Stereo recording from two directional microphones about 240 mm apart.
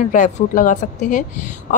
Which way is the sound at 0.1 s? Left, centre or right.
Left.